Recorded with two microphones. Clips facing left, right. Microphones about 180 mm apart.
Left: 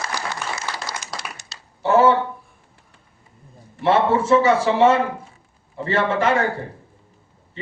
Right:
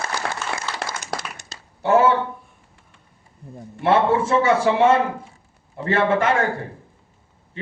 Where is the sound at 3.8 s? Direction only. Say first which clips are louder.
Even; 55° right (ahead or behind).